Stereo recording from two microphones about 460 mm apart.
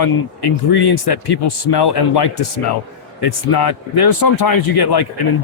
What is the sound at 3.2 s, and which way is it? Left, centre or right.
Speech, left.